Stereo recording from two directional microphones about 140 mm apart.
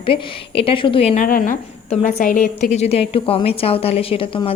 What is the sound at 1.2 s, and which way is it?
A woman's voice, 70° left (ahead or behind).